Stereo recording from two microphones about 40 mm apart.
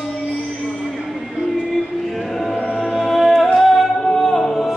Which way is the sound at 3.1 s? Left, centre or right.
Centre.